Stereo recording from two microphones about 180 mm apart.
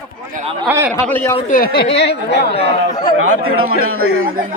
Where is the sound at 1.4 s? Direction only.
50° left (ahead or behind).